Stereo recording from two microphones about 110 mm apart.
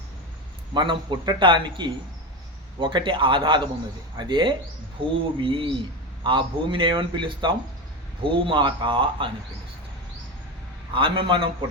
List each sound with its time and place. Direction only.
0.7 s speech: 45° right (ahead or behind)
10.9 s speech: 55° right (ahead or behind)